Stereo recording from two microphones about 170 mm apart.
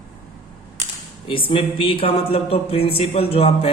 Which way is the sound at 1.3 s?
30° left (ahead or behind).